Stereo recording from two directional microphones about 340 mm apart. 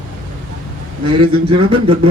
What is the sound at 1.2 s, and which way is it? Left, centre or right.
Speech, centre.